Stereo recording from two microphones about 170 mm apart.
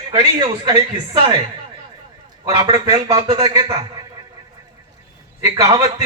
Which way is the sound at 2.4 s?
25° right (ahead or behind).